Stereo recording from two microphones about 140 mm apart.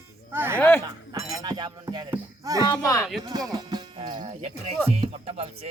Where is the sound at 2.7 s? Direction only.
25° left (ahead or behind).